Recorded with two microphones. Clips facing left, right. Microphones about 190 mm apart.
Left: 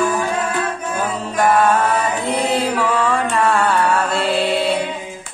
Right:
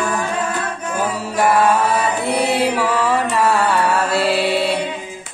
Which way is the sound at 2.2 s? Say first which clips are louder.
Right 2 dB; 10° right (ahead or behind).